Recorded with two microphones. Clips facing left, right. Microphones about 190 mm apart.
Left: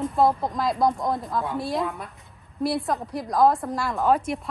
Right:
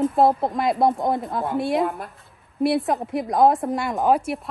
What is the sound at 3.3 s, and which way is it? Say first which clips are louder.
A woman's voice: right 2 dB; 20° right (ahead or behind).